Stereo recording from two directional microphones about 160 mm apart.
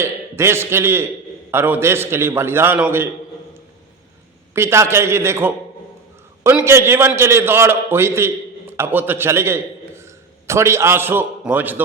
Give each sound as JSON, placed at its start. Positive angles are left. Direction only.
{"t": 0.0, "sound": "a man's voice", "side_deg": -15}
{"t": 4.5, "sound": "a man's voice", "side_deg": -15}
{"t": 6.7, "sound": "a man's voice", "side_deg": -15}